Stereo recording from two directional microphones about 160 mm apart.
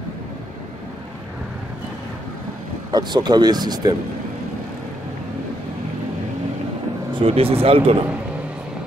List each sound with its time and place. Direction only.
2.9 s speech: 25° right (ahead or behind)
7.2 s speech: 35° right (ahead or behind)